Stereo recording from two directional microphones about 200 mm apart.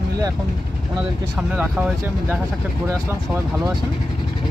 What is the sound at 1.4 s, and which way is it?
Speech, 5° right (ahead or behind).